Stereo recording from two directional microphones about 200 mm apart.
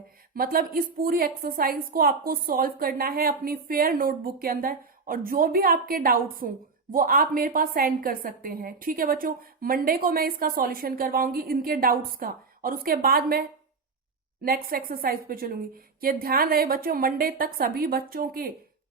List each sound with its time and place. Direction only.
0.3 s a woman's voice: 45° right (ahead or behind)
14.4 s a woman's voice: 45° right (ahead or behind)